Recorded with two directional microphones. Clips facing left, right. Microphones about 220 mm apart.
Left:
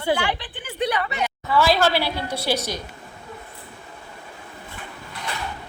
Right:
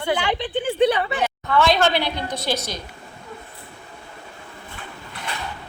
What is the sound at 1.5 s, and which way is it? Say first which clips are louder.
A woman's voice: even; 5° left (ahead or behind).